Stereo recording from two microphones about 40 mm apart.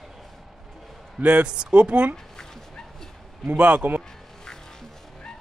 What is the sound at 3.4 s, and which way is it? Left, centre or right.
Speech, right.